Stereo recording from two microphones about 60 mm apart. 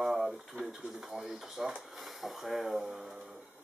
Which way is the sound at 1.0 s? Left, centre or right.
Centre.